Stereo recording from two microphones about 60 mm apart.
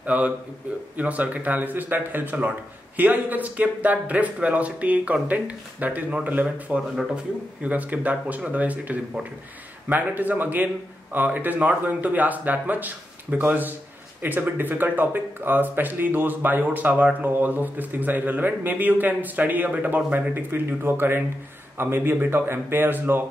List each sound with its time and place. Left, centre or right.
0.0 s a man's voice: right